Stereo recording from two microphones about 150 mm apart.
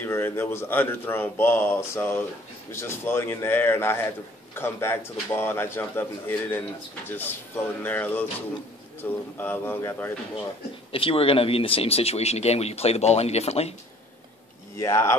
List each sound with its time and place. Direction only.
0.0 s speech: 15° left (ahead or behind)
7.8 s speech: 10° left (ahead or behind)
10.9 s speech: 35° left (ahead or behind)
14.8 s speech: 20° left (ahead or behind)